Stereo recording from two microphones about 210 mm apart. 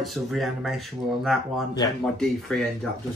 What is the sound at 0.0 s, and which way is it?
Speech, centre (ahead or behind).